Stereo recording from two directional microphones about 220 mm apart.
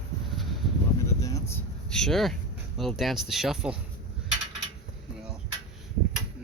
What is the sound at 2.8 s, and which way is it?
Speech, centre (ahead or behind).